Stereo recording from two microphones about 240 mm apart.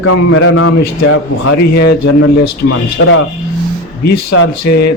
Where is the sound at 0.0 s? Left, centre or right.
Left.